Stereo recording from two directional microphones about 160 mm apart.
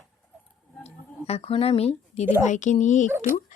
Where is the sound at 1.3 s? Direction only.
35° left (ahead or behind).